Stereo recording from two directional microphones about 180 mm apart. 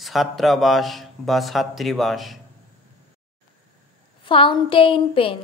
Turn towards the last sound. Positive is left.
turn(degrees=30)  # may be behind; listen again after turning